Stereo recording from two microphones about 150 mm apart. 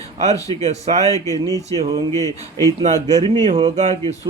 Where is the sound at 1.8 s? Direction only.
40° right (ahead or behind).